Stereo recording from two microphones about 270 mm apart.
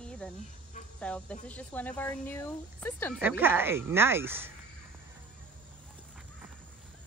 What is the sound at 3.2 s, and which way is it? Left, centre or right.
Speech, centre.